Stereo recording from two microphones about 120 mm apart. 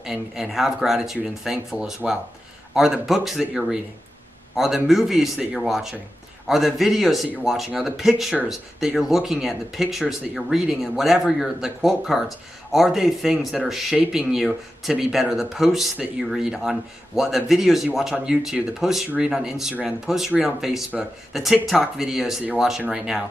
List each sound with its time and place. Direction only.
0.0 s speech: 5° right (ahead or behind)